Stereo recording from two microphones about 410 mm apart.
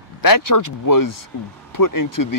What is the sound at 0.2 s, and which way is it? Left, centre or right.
Speech, left.